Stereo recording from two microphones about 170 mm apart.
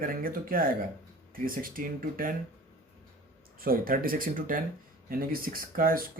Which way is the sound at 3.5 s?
60° right (ahead or behind).